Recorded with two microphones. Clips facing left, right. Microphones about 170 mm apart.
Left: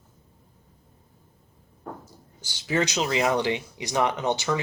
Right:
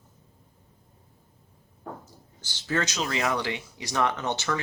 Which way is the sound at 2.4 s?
15° left (ahead or behind).